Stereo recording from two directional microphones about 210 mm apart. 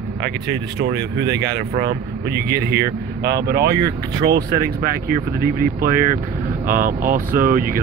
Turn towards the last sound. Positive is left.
turn(degrees=-40)  # may be behind; listen again after turning